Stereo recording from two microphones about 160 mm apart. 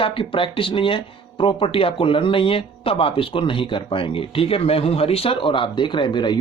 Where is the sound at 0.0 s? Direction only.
35° left (ahead or behind).